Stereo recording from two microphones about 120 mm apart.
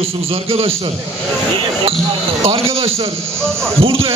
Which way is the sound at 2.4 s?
50° right (ahead or behind).